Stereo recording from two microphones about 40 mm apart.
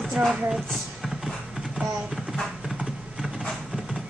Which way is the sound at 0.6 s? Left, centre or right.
Centre.